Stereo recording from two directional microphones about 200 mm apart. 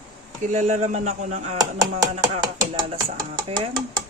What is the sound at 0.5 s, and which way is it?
Speech, 35° right (ahead or behind).